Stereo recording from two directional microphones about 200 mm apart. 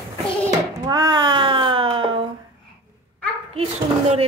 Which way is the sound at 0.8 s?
20° right (ahead or behind).